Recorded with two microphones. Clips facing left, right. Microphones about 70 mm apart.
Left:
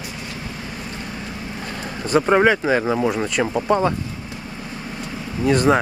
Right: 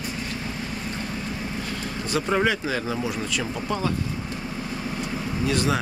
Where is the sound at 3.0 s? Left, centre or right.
Left.